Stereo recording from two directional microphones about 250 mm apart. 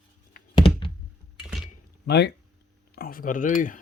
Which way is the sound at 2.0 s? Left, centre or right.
Left.